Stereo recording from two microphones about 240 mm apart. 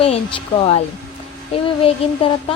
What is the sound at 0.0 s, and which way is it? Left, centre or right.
Speech, left.